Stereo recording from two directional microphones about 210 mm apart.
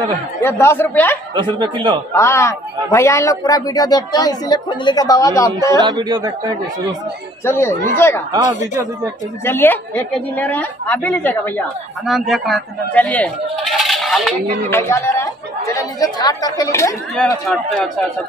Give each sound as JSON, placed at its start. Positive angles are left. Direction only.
{"t": 0.4, "sound": "a man's voice", "side_deg": 10}
{"t": 1.3, "sound": "a man's voice", "side_deg": -20}
{"t": 2.1, "sound": "a man's voice", "side_deg": 15}
{"t": 5.8, "sound": "a man's voice", "side_deg": -20}
{"t": 7.4, "sound": "a man's voice", "side_deg": 10}
{"t": 9.4, "sound": "a man's voice", "side_deg": 10}
{"t": 14.8, "sound": "a man's voice", "side_deg": 10}